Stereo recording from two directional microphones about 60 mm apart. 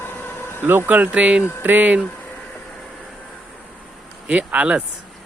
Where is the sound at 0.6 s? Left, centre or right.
Right.